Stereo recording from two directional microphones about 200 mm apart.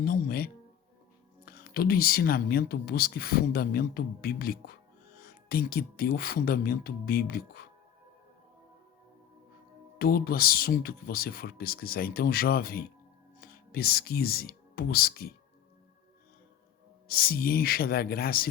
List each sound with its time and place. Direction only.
0.0 s music: 50° left (ahead or behind)
1.5 s speech: 50° left (ahead or behind)
10.0 s speech: 50° left (ahead or behind)
17.1 s speech: 50° left (ahead or behind)